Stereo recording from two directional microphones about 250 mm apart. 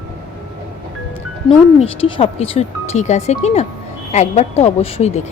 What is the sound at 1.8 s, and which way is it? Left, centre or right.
Speech, left.